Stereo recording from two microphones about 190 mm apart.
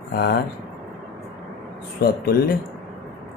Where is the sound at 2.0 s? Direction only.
55° left (ahead or behind).